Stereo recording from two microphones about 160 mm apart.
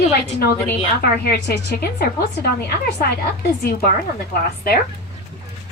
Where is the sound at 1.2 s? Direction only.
75° left (ahead or behind).